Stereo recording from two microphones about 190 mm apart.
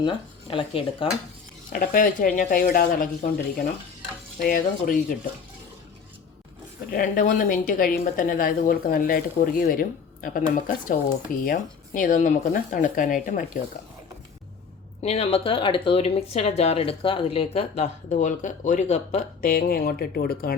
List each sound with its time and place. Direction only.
0.0 s speech: 25° left (ahead or behind)
1.7 s a woman's voice: 50° left (ahead or behind)
4.4 s a woman's voice: 45° left (ahead or behind)
6.9 s a woman's voice: 45° left (ahead or behind)
15.0 s speech: 35° left (ahead or behind); by 20.6 s 50° left (ahead or behind)